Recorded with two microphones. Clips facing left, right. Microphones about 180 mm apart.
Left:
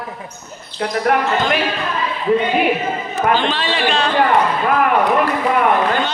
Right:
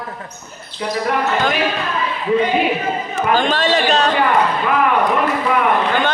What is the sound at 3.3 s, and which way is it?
Speech, 45° right (ahead or behind).